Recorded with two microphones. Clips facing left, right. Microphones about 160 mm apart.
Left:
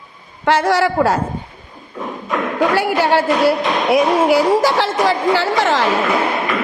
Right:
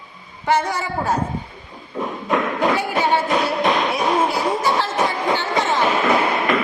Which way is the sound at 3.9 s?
90° left.